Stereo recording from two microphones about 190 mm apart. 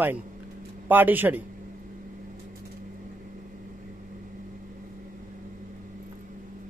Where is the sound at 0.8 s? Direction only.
10° right (ahead or behind).